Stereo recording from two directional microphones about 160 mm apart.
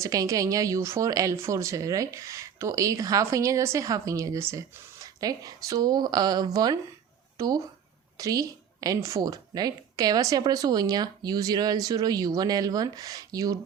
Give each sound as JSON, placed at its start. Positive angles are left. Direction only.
{"t": 0.0, "sound": "a woman's voice", "side_deg": -20}